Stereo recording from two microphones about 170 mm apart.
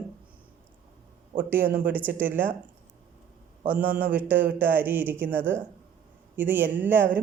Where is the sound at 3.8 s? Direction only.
55° right (ahead or behind).